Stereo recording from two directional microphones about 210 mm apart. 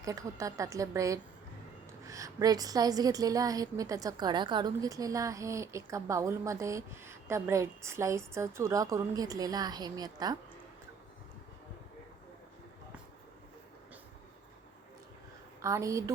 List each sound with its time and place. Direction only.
0.0 s a woman's voice: 15° right (ahead or behind)
15.6 s a woman's voice: 15° right (ahead or behind)